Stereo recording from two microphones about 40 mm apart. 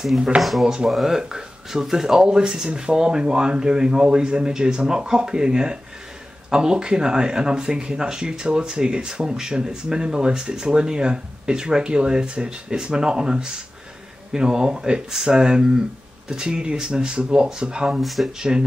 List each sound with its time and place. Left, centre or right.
0.4 s speech: centre; by 18.0 s right
18.0 s speech: centre
18.4 s speech: centre